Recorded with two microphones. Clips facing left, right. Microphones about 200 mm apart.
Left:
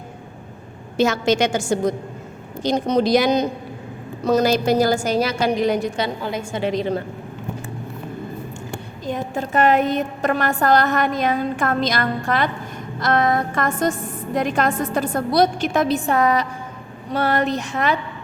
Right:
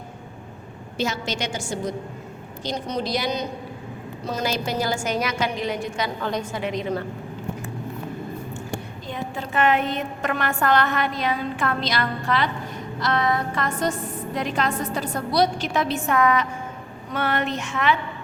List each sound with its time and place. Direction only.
0.9 s a woman's voice: 50° left (ahead or behind)
1.4 s a woman's voice: 90° left
1.6 s a woman's voice: 45° left (ahead or behind)
9.0 s a woman's voice: 45° left (ahead or behind)